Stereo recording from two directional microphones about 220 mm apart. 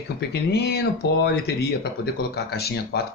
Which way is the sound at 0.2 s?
45° left (ahead or behind).